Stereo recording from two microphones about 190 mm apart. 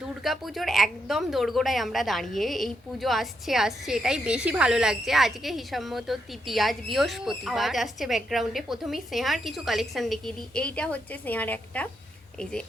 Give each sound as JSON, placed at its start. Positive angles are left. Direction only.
{"t": 0.3, "sound": "a woman's voice", "side_deg": 0}